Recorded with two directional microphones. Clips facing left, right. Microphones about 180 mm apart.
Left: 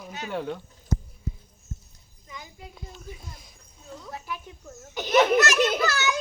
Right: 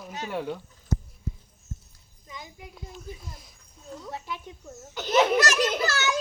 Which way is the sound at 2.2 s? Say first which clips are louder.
Right 1 dB; 20° right (ahead or behind).